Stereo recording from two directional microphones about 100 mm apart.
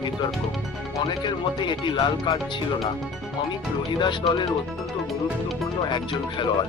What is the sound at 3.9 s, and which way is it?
Speech, 50° left (ahead or behind).